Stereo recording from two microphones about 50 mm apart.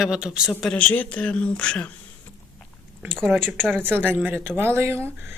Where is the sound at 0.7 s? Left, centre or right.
Left.